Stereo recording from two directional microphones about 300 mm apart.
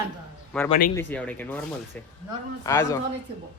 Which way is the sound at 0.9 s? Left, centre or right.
Centre.